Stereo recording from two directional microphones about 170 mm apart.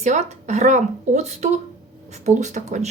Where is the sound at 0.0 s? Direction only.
45° right (ahead or behind).